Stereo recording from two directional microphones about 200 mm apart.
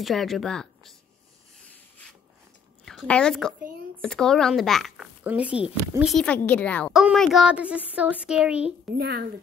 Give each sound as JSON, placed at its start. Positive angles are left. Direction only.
{"t": 0.0, "sound": "a child's voice", "side_deg": 0}
{"t": 2.8, "sound": "a child's voice", "side_deg": 0}
{"t": 8.9, "sound": "speech", "side_deg": -50}